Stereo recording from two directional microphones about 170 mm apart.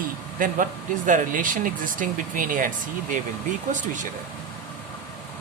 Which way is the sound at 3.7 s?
50° right (ahead or behind).